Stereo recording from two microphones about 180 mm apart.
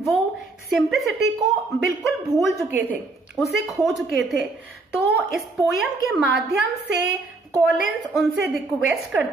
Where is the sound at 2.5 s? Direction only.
10° right (ahead or behind).